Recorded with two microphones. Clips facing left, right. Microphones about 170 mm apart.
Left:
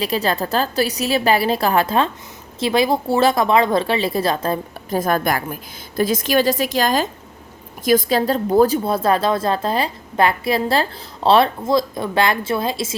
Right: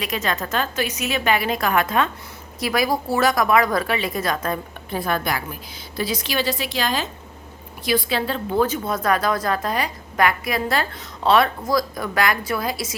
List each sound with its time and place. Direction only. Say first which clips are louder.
0.0 s a woman's voice: left 5 dB; 35° left (ahead or behind)
4.9 s a woman's voice: left 5 dB; 45° left (ahead or behind); by 13.0 s 25° left (ahead or behind)